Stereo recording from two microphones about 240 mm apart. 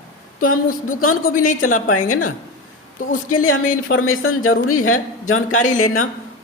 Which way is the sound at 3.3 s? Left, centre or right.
Left.